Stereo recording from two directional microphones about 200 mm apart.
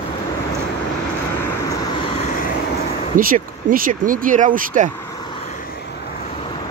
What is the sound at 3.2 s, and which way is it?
Speech, 45° right (ahead or behind).